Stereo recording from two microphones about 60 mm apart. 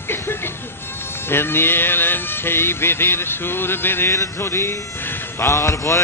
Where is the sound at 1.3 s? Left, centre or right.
Left.